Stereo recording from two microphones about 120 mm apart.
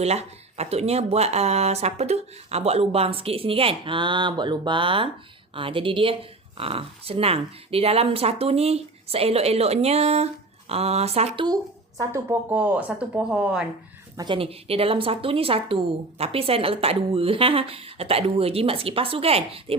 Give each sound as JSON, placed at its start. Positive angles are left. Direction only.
{"t": 0.0, "sound": "speech", "side_deg": -60}
{"t": 11.3, "sound": "speech", "side_deg": -30}
{"t": 14.2, "sound": "speech", "side_deg": -45}